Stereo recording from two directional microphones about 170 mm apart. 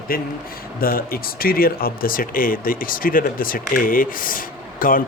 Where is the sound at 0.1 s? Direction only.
60° left (ahead or behind).